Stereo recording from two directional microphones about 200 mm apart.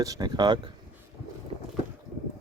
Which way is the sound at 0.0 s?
20° right (ahead or behind).